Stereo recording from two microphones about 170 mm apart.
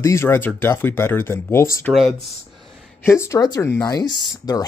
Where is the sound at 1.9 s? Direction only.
10° right (ahead or behind).